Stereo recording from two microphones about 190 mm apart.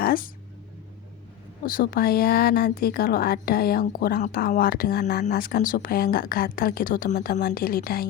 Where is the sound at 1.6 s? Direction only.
50° left (ahead or behind).